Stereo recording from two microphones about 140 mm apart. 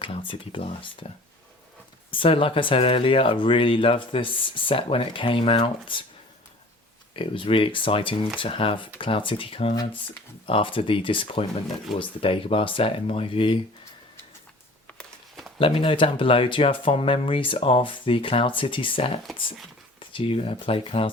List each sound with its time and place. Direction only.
0.0 s speech: 40° left (ahead or behind)
2.0 s speech: 40° left (ahead or behind)
7.2 s speech: 40° left (ahead or behind)
14.9 s a sound: centre (ahead or behind)
15.5 s speech: 40° left (ahead or behind)